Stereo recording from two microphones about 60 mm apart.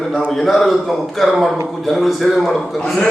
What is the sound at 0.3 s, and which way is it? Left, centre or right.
A man's voice, centre.